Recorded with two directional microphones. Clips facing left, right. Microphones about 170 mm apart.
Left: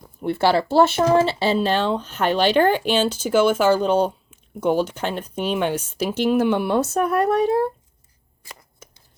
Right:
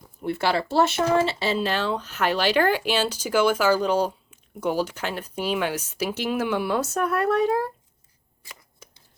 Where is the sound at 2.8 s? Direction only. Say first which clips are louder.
Left 4 dB; 5° right (ahead or behind).